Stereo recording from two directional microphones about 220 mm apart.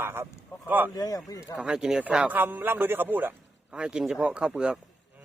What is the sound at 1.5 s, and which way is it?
A man's voice, 5° right (ahead or behind).